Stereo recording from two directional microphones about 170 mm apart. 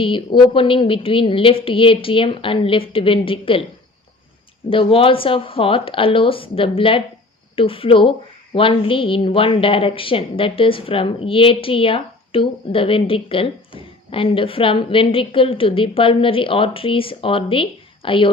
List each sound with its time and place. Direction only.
0.0 s a woman's voice: 30° left (ahead or behind)
4.7 s a woman's voice: 30° left (ahead or behind)